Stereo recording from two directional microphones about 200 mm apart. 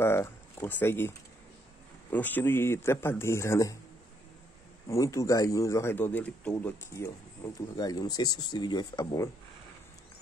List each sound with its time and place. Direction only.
0.0 s speech: 10° left (ahead or behind)
2.1 s speech: 10° left (ahead or behind)
4.8 s speech: 15° left (ahead or behind)